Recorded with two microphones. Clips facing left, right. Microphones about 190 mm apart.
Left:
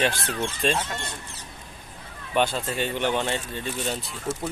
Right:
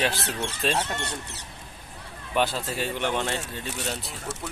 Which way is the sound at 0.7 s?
70° right (ahead or behind).